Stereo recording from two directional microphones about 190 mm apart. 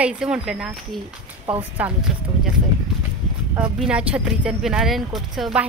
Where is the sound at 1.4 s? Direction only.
30° right (ahead or behind).